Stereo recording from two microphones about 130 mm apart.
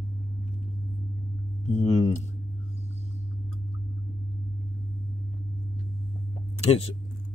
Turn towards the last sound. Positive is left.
turn(degrees=50)  # may be behind; listen again after turning